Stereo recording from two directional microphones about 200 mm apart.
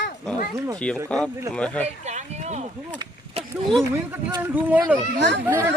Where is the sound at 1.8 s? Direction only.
35° right (ahead or behind).